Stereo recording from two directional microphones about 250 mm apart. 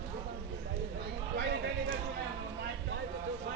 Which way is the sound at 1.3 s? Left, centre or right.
Right.